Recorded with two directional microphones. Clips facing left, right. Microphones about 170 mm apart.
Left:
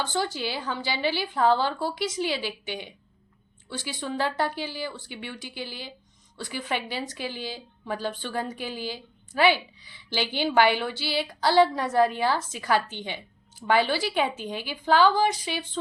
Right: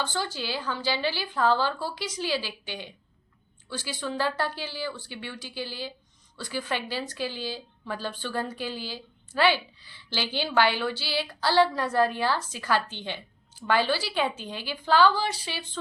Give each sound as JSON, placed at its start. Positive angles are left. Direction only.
{"t": 0.0, "sound": "a woman's voice", "side_deg": 20}